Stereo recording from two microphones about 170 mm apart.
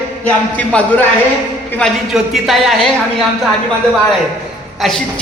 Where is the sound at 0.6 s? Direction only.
10° left (ahead or behind).